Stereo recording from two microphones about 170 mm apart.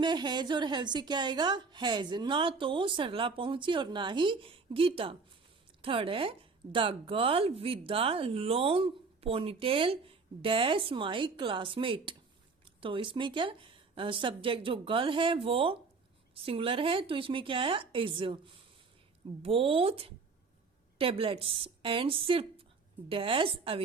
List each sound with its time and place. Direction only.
0.0 s a woman's voice: 25° right (ahead or behind)